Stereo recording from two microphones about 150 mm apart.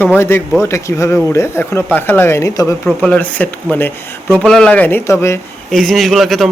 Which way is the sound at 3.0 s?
10° left (ahead or behind).